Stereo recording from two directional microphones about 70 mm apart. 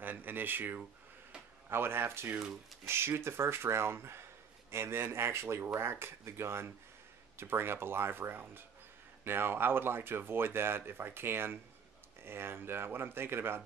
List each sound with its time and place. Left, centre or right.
0.0 s speech: right